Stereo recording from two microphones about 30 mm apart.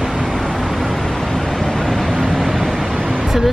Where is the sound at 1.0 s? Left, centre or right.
Centre.